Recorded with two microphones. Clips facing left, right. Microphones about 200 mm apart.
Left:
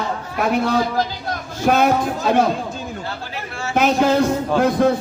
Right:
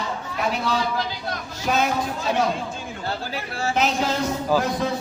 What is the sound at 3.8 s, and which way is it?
A man's voice, 55° left (ahead or behind).